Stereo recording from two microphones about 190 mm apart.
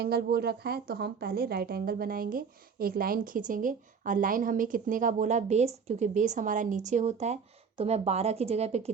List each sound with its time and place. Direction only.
0.0 s speech: 55° right (ahead or behind); by 8.9 s 35° right (ahead or behind)